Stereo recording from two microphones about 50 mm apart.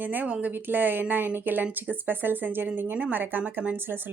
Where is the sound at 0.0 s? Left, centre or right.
Right.